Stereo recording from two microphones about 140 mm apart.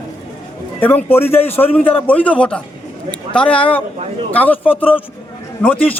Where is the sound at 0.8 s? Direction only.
15° left (ahead or behind).